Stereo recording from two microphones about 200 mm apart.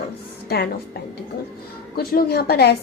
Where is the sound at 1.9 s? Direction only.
50° left (ahead or behind).